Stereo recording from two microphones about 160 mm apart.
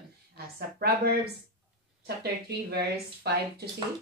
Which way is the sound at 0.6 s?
75° right (ahead or behind).